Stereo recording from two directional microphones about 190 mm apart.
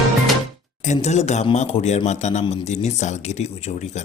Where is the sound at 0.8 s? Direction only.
40° left (ahead or behind).